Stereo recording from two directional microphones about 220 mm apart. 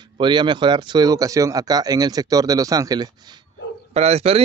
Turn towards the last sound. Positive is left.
turn(degrees=-30)  # may be behind; listen again after turning